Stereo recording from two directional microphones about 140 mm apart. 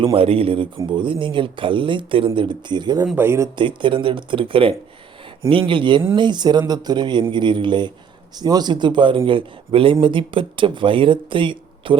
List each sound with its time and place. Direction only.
0.0 s speech: 40° right (ahead or behind)
3.2 s speech: 20° right (ahead or behind)
3.5 s speech: 35° right (ahead or behind)